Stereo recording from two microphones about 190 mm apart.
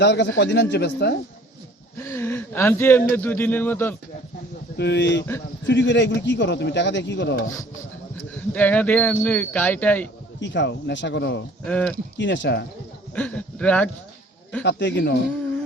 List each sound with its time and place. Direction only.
0.0 s a man's voice: 65° left (ahead or behind)
2.0 s speech: 15° left (ahead or behind)
4.8 s speech: 65° left (ahead or behind)
8.4 s speech: 10° left (ahead or behind)
10.4 s speech: 70° left (ahead or behind)
11.6 s speech: 5° left (ahead or behind)
12.1 s speech: 70° left (ahead or behind)
13.1 s speech: 5° left (ahead or behind)
14.6 s speech: 65° left (ahead or behind)